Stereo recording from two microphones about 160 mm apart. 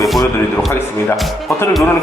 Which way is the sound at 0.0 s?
Centre (ahead or behind).